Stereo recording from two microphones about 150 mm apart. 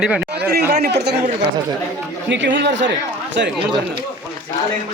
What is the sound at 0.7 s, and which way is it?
Speech, 90° right.